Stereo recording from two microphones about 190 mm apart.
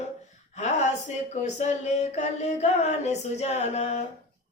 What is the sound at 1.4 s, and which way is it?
A woman's voice, 35° left (ahead or behind).